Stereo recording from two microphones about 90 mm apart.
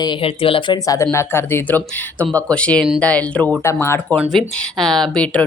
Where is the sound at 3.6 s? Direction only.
30° left (ahead or behind).